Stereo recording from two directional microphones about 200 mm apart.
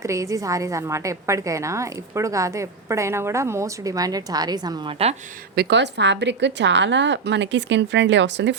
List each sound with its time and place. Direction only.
0.0 s a woman's voice: 15° right (ahead or behind)
5.5 s a woman's voice: 60° right (ahead or behind)